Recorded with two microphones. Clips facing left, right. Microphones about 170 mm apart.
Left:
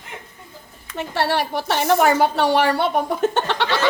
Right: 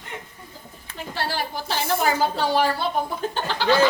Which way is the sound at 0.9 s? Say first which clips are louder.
Left 7 dB; 70° left (ahead or behind).